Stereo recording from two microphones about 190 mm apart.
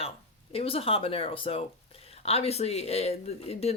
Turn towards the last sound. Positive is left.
turn(degrees=35)  # may be behind; listen again after turning